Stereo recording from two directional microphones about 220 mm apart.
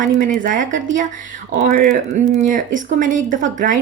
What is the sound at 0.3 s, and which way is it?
Speech, 35° right (ahead or behind).